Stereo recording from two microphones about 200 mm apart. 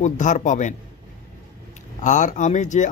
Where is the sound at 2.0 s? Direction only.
40° left (ahead or behind).